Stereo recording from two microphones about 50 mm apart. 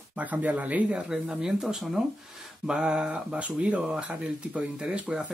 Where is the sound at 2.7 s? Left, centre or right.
Centre.